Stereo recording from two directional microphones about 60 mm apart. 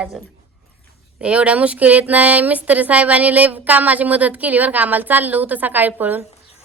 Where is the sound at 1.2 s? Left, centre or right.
Right.